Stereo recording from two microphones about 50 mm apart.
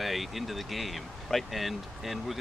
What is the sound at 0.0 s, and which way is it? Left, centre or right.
Speech, centre.